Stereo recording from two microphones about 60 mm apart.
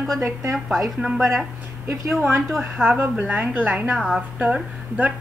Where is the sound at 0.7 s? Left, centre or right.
Centre.